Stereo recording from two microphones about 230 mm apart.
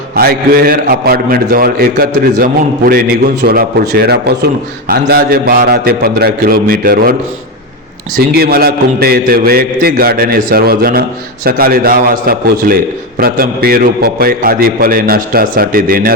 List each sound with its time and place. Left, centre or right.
0.2 s a man's voice: right